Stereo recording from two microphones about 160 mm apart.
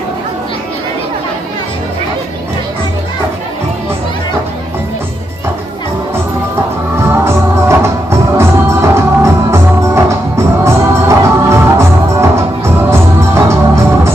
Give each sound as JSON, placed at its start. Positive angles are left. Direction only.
{"t": 7.0, "sound": "music", "side_deg": -15}